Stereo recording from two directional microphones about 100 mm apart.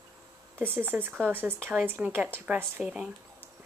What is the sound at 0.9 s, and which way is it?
Speech, 20° right (ahead or behind).